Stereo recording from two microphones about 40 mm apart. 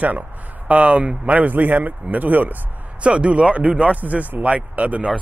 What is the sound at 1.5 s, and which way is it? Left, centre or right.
Speech, right.